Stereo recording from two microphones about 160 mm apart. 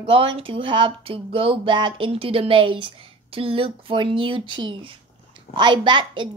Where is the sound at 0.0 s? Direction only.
35° right (ahead or behind).